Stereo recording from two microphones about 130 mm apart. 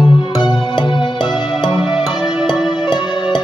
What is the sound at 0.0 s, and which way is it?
Music, 35° left (ahead or behind).